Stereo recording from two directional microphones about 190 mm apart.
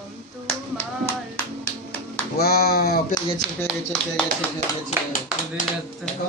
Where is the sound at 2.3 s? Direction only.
55° left (ahead or behind).